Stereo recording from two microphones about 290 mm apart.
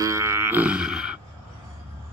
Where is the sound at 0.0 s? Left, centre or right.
Centre.